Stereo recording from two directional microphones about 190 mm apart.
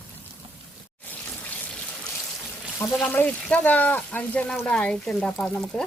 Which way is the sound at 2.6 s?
10° left (ahead or behind).